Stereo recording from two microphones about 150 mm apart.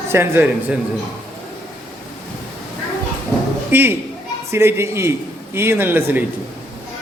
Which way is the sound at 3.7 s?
15° right (ahead or behind).